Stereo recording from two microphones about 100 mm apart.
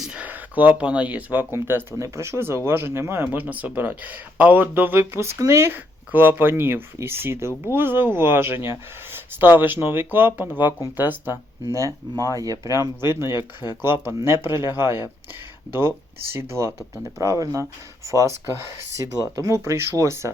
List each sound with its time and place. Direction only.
0.0 s speech: 10° right (ahead or behind)
11.6 s speech: 30° right (ahead or behind)
13.3 s speech: 45° left (ahead or behind)
14.0 s speech: 25° right (ahead or behind)
16.3 s speech: 25° right (ahead or behind)